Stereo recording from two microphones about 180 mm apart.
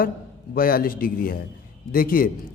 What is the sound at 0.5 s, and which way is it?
A man's voice, 55° left (ahead or behind).